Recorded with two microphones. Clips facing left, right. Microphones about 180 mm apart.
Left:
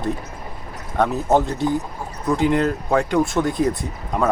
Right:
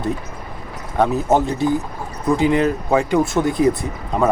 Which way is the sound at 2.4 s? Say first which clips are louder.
Right 1 dB; 10° right (ahead or behind).